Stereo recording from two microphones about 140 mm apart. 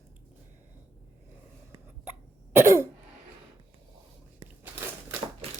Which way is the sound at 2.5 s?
20° right (ahead or behind).